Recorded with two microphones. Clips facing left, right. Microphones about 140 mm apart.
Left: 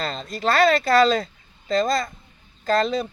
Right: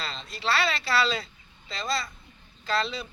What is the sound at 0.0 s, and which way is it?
Speech, 45° left (ahead or behind).